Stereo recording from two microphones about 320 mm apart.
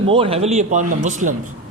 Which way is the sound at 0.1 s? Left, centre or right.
Centre.